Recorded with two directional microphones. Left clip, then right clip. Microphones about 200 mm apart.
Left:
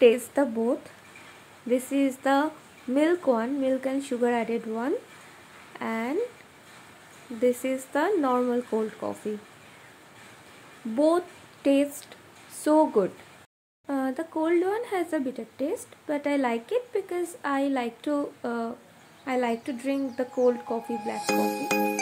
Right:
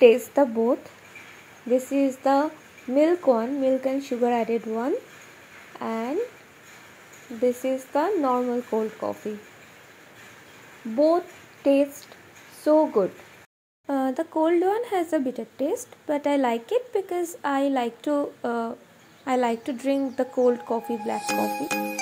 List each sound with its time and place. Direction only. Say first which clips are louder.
0.0 s speech: right 4 dB; 5° right (ahead or behind)
1.9 s speech: right 3 dB; centre (ahead or behind)
7.4 s speech: right 1 dB; 5° left (ahead or behind)
11.0 s speech: right 3 dB; 10° left (ahead or behind)
13.8 s speech: right 4 dB; 10° right (ahead or behind)